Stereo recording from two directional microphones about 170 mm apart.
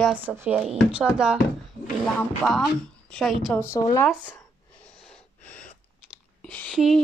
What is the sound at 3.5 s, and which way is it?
Speech, 15° left (ahead or behind).